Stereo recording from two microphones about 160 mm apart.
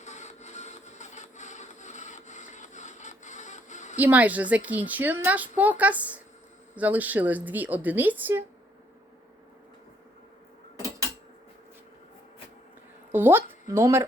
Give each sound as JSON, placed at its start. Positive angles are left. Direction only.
{"t": 0.0, "sound": "wood", "side_deg": 45}
{"t": 3.9, "sound": "a woman's voice", "side_deg": -10}
{"t": 13.1, "sound": "speech", "side_deg": -15}